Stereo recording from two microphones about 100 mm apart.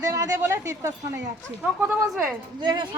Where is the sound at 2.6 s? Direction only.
45° right (ahead or behind).